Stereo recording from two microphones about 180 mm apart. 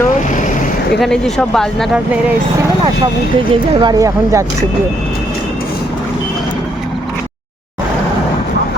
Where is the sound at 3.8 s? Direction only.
20° right (ahead or behind).